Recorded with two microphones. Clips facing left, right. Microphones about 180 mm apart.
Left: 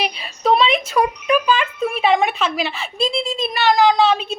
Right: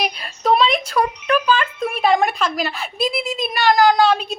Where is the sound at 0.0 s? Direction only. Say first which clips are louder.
Left 1 dB; centre (ahead or behind).